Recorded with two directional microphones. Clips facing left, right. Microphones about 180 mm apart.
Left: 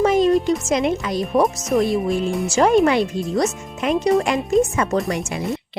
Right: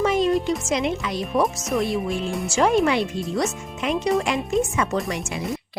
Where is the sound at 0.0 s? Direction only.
45° left (ahead or behind).